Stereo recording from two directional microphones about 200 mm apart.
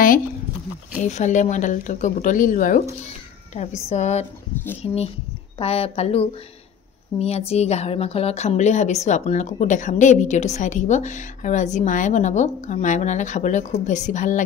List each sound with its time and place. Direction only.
1.0 s a woman's voice: 35° left (ahead or behind)